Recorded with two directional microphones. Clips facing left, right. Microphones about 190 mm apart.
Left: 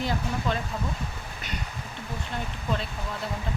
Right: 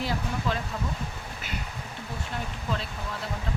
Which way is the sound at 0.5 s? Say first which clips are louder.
Left 1 dB; 5° right (ahead or behind).